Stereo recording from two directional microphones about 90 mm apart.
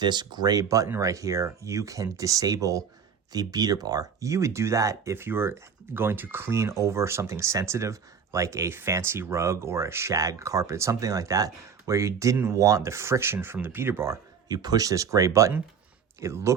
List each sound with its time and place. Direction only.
0.0 s speech: 55° right (ahead or behind); by 14.2 s 30° right (ahead or behind)
14.4 s speech: 50° right (ahead or behind)